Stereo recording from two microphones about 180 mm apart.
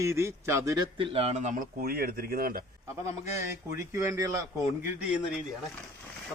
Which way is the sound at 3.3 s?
15° right (ahead or behind).